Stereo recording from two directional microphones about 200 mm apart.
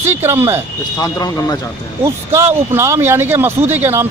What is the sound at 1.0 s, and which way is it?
Speech, 20° left (ahead or behind).